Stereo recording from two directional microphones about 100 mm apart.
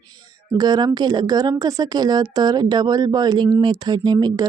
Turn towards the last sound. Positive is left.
turn(degrees=-45)  # may be behind; listen again after turning